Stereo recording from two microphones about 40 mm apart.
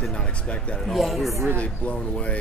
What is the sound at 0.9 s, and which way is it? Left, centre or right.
Speech, centre.